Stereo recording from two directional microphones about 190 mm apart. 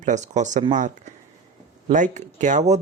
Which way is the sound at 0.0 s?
40° right (ahead or behind).